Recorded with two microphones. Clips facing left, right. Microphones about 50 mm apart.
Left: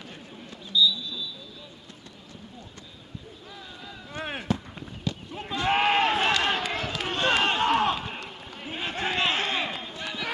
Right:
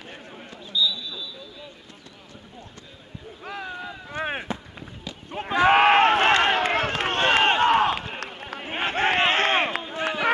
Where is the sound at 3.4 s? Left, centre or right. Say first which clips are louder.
Right 10 dB; right.